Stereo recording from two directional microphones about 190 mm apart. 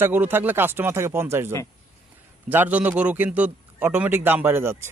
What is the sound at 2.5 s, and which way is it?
A man's voice, 10° right (ahead or behind).